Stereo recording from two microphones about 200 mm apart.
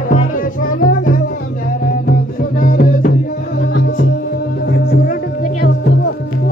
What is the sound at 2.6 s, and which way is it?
Music, 45° left (ahead or behind).